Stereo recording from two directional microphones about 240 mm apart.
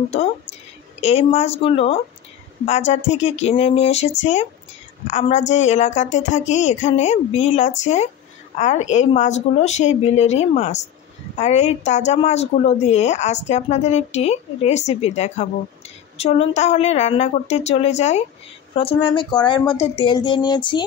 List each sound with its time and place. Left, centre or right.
1.0 s a woman's voice: left